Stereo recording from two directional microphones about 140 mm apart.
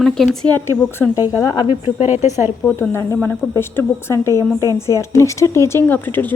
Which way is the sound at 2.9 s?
20° left (ahead or behind).